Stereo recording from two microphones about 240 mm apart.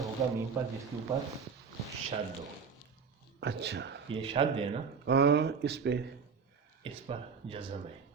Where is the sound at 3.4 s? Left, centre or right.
Right.